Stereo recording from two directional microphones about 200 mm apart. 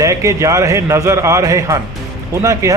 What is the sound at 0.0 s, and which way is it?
Speech, 15° right (ahead or behind).